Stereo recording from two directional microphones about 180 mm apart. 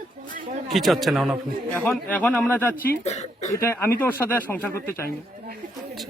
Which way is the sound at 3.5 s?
15° left (ahead or behind).